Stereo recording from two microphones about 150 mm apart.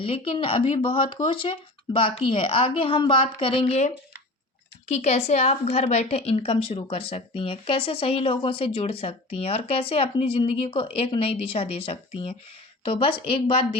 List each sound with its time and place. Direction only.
0.0 s a woman's voice: 35° left (ahead or behind)